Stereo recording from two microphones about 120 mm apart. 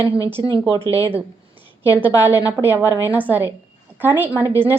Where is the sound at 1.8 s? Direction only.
15° right (ahead or behind).